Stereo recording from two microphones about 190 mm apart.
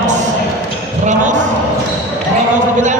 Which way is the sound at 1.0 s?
40° right (ahead or behind).